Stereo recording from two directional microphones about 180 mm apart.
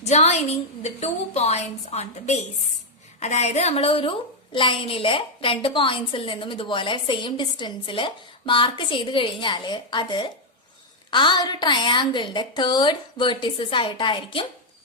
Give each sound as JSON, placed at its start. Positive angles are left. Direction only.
{"t": 0.0, "sound": "a woman's voice", "side_deg": 35}